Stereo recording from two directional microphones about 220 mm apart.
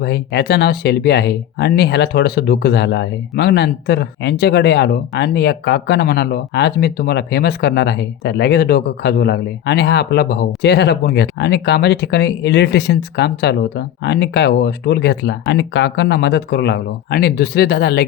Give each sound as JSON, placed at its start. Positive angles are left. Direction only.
{"t": 0.0, "sound": "speech", "side_deg": 50}